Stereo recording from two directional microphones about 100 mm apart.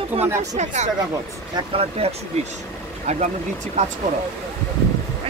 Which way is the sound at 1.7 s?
90° right.